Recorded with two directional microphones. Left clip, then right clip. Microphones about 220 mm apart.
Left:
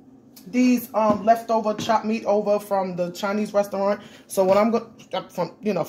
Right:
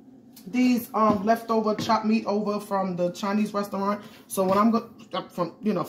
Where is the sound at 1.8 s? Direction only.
25° left (ahead or behind).